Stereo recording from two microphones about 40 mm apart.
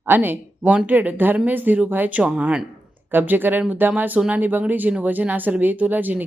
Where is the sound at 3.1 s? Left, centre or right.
Right.